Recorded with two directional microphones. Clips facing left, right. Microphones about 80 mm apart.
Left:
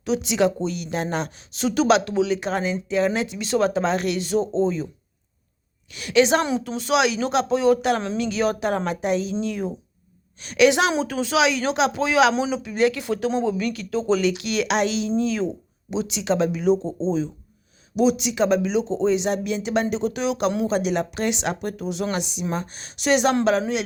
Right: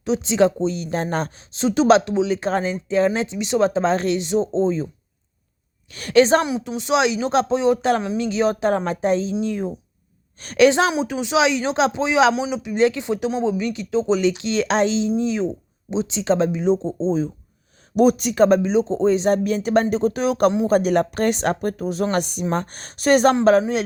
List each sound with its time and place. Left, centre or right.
0.0 s speech: right
1.6 s speech: right
5.9 s speech: right
6.4 s speech: centre
10.4 s speech: right
10.9 s speech: centre
17.9 s speech: right